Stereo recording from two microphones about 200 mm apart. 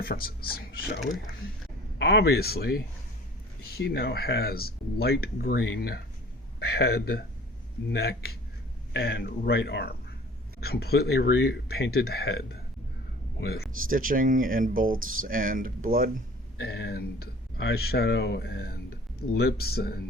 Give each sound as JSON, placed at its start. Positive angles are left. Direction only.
{"t": 0.0, "sound": "speech", "side_deg": 50}
{"t": 5.6, "sound": "speech", "side_deg": 70}
{"t": 6.6, "sound": "speech", "side_deg": 50}
{"t": 13.9, "sound": "speech", "side_deg": -45}
{"t": 16.6, "sound": "speech", "side_deg": 55}